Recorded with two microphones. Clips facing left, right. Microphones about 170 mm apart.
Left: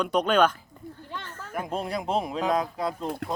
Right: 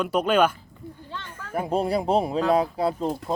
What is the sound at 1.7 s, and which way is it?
Speech, 35° right (ahead or behind).